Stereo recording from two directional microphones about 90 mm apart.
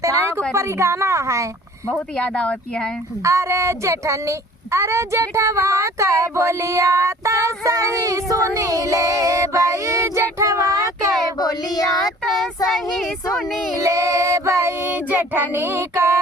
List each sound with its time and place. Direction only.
0.0 s a sound: 35° right (ahead or behind)
0.5 s speech: 30° right (ahead or behind)
1.9 s speech: 10° left (ahead or behind)
3.2 s speech: 35° right (ahead or behind)
11.3 s speech: 45° left (ahead or behind)
12.6 s speech: centre (ahead or behind)
13.7 s speech: 35° right (ahead or behind)
15.1 s child singing: 20° right (ahead or behind)